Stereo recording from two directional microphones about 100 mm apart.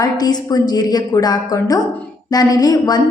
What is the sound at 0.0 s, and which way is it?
A woman's voice, 40° left (ahead or behind).